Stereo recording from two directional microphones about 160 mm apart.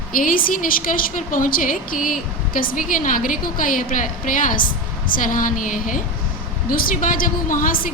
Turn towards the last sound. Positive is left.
turn(degrees=60)  # may be behind; listen again after turning